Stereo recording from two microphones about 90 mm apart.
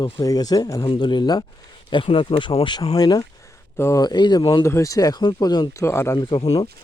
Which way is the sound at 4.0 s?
55° left (ahead or behind).